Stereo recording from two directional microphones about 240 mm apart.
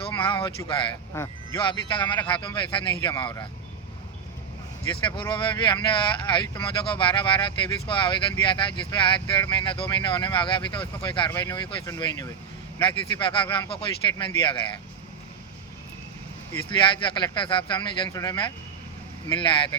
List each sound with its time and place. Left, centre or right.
0.0 s speech: left
5.3 s speech: centre
16.6 s speech: centre